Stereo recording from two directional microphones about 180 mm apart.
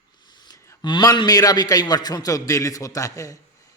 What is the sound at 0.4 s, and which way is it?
A man's voice, 20° left (ahead or behind).